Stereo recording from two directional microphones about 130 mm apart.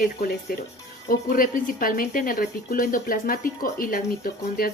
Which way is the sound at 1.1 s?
90° left.